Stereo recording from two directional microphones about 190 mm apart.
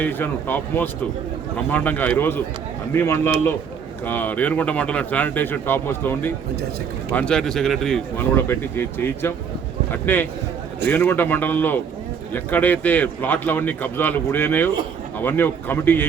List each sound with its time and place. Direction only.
0.0 s speech: 10° left (ahead or behind)